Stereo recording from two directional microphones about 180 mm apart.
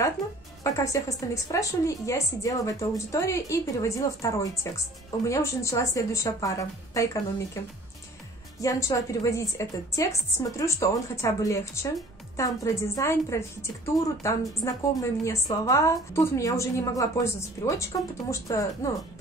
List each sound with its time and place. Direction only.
0.7 s a woman's voice: 20° left (ahead or behind)
8.5 s a woman's voice: 20° left (ahead or behind)